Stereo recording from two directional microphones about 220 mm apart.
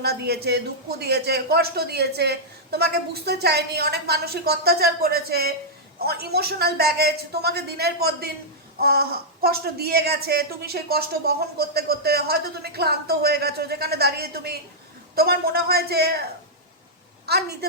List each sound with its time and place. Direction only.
0.0 s speech: 45° right (ahead or behind)
17.2 s speech: 45° right (ahead or behind)